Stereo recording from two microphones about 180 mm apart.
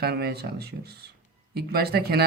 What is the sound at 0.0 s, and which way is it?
Speech, 60° right (ahead or behind).